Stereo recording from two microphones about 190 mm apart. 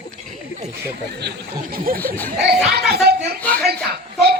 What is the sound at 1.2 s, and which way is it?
Speech, 55° right (ahead or behind).